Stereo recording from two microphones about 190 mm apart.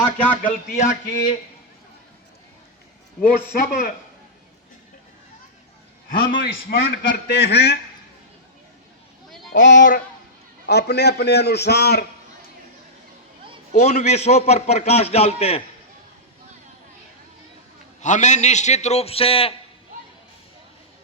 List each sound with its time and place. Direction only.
0.0 s speech: 10° left (ahead or behind)
0.4 s a man's voice: 40° left (ahead or behind)
3.2 s a man's voice: 45° left (ahead or behind)
6.1 s a man's voice: 60° left (ahead or behind)
9.5 s speech: 70° left (ahead or behind)
10.7 s a man's voice: 60° left (ahead or behind)
13.7 s a man's voice: 35° left (ahead or behind)
18.0 s a man's voice: 40° left (ahead or behind)